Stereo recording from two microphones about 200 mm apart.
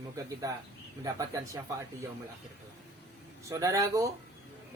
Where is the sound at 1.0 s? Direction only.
15° right (ahead or behind).